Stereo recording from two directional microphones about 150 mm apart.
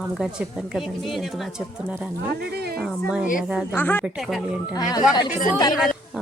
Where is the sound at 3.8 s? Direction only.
15° left (ahead or behind).